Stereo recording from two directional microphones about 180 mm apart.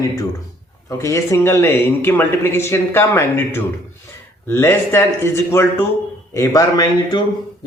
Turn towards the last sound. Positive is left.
turn(degrees=20)  # may be behind; listen again after turning